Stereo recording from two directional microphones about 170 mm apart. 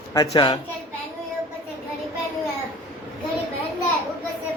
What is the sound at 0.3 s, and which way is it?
Speech, 25° left (ahead or behind).